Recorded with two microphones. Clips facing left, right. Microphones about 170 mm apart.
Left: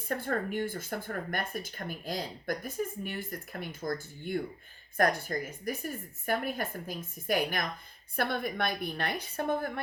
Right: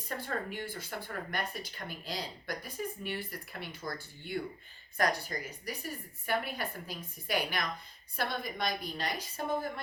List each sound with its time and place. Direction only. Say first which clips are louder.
0.1 s a woman's voice: left 5 dB; 50° left (ahead or behind)